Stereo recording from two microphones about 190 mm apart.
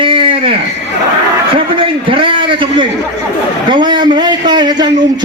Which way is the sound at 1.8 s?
25° right (ahead or behind).